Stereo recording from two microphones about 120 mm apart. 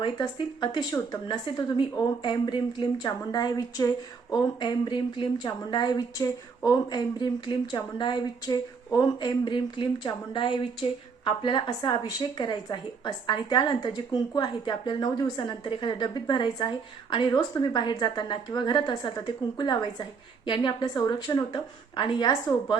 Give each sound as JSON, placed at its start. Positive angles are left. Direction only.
{"t": 0.0, "sound": "a woman's voice", "side_deg": 40}